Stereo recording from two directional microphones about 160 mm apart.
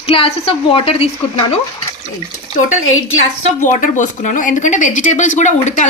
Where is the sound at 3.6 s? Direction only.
50° left (ahead or behind).